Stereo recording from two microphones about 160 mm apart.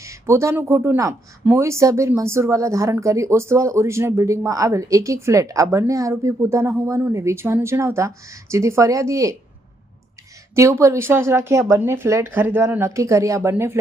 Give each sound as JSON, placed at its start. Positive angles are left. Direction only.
{"t": 0.0, "sound": "speech", "side_deg": -20}
{"t": 10.5, "sound": "speech", "side_deg": -20}